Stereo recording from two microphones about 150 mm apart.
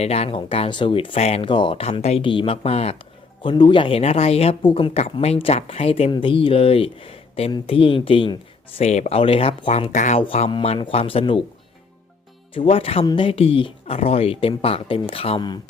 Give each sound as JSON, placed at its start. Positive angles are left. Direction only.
{"t": 0.0, "sound": "speech", "side_deg": 45}
{"t": 3.4, "sound": "speech", "side_deg": 30}
{"t": 4.9, "sound": "speech", "side_deg": 45}
{"t": 8.8, "sound": "speech", "side_deg": 45}
{"t": 10.2, "sound": "speech", "side_deg": 40}
{"t": 12.5, "sound": "speech", "side_deg": 40}